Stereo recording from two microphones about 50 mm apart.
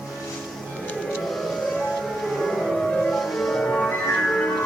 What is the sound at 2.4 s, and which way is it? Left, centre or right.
Music, centre.